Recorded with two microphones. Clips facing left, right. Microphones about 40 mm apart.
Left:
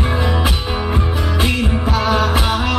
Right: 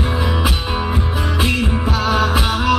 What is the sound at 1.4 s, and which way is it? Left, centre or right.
Music, centre.